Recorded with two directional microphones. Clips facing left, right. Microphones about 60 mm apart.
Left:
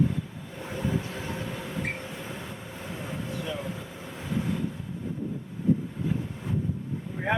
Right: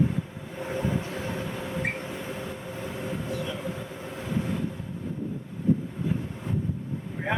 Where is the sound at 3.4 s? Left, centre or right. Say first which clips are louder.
Right 1 dB; centre.